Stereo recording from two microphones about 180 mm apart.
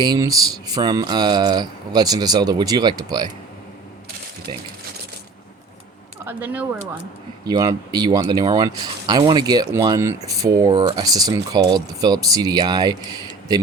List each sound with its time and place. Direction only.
0.0 s speech: 20° right (ahead or behind)
6.2 s speech: 10° right (ahead or behind)
7.4 s speech: 20° right (ahead or behind)